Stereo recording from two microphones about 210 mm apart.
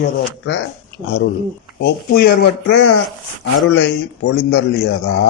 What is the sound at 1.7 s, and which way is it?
A man's voice, 50° left (ahead or behind).